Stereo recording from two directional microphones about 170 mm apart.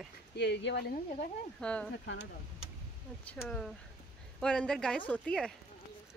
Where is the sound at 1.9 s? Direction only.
90° left.